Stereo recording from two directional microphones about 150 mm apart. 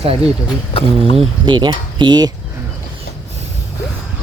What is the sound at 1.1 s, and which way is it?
Speech, 30° right (ahead or behind).